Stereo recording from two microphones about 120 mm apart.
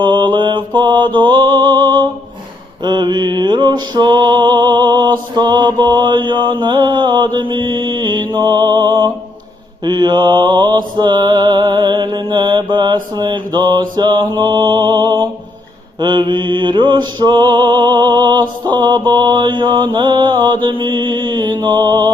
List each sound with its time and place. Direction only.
0.0 s mantra: 40° right (ahead or behind)
2.8 s music: 40° right (ahead or behind)